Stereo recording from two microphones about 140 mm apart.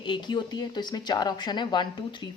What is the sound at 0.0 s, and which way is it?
Speech, 35° left (ahead or behind).